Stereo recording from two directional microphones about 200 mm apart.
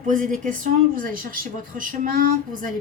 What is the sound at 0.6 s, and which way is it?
A woman's voice, 45° right (ahead or behind).